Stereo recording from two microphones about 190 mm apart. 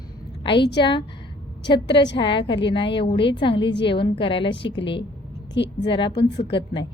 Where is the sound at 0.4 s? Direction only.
25° left (ahead or behind).